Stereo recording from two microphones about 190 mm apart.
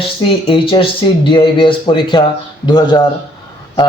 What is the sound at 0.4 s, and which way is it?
A man's voice, 30° left (ahead or behind).